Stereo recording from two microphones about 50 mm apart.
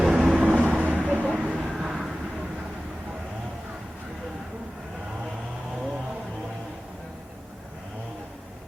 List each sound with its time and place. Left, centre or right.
0.0 s vehicle: centre
0.3 s vehicle: right; by 2.1 s centre